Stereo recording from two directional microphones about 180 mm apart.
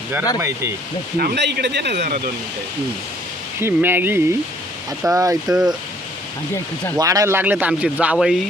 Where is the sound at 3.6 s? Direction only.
10° right (ahead or behind).